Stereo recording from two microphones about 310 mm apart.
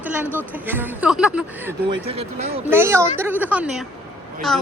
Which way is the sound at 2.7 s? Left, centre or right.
Centre.